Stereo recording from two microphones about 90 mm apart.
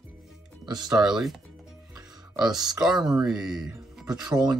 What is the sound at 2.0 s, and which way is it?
Music, 50° right (ahead or behind).